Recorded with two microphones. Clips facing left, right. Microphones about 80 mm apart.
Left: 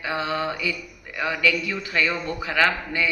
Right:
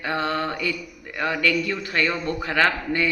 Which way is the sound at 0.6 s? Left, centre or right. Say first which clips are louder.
Right 1 dB; right.